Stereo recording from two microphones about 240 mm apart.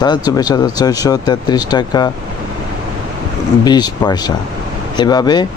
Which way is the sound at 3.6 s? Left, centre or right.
Centre.